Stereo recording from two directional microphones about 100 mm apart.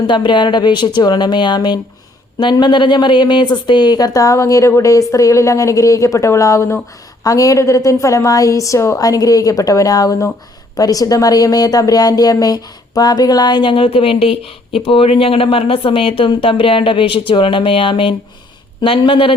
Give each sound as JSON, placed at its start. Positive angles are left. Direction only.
{"t": 0.1, "sound": "a woman's voice", "side_deg": 50}